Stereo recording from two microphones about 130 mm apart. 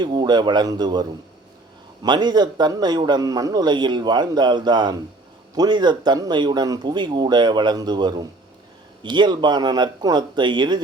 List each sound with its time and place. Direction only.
0.0 s a man's voice: 35° right (ahead or behind)